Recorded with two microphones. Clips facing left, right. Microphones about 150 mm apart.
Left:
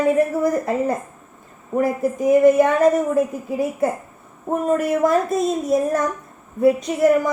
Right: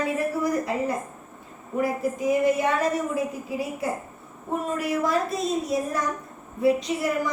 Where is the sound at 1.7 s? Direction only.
50° left (ahead or behind).